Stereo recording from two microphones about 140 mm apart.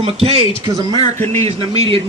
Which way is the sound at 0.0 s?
45° right (ahead or behind).